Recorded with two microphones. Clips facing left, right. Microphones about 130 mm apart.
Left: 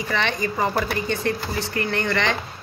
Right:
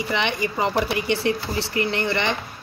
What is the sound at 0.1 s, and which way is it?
A woman's voice, 15° right (ahead or behind).